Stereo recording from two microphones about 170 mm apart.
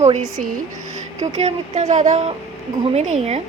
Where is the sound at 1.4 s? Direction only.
45° right (ahead or behind).